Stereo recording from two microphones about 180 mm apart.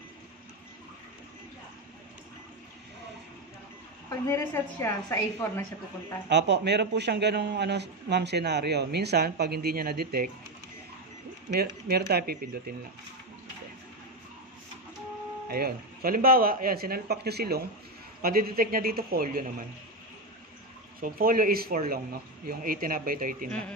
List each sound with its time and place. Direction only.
4.1 s a woman's voice: 15° left (ahead or behind)
6.2 s a man's voice: 75° right (ahead or behind); by 10.3 s 55° right (ahead or behind)
12.1 s speech: 60° right (ahead or behind)
15.4 s speech: 55° right (ahead or behind)
21.0 s speech: 55° right (ahead or behind)